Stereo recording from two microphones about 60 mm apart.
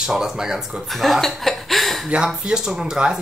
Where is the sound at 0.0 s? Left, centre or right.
Centre.